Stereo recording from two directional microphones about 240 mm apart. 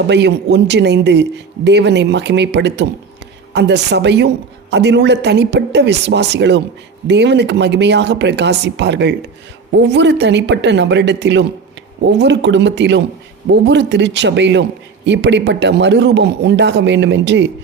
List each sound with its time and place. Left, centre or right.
0.1 s speech: right